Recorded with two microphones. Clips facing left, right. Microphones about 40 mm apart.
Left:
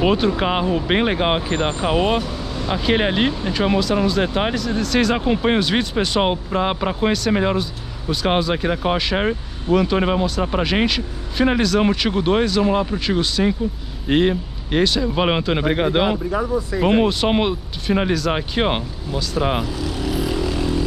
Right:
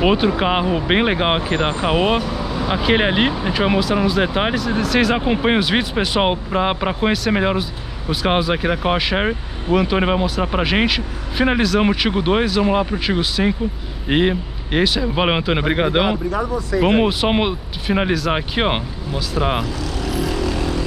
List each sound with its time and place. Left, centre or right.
0.0 s speech: centre
16.3 s speech: centre
16.8 s speech: centre
19.6 s vehicle: centre